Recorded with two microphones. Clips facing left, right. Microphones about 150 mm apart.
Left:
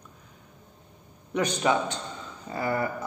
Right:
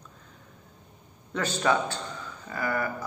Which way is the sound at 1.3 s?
20° left (ahead or behind).